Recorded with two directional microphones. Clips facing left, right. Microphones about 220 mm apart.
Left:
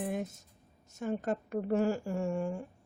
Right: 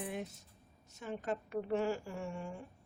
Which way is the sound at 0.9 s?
45° left (ahead or behind).